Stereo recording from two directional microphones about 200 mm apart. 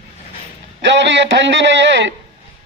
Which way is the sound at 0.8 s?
60° right (ahead or behind).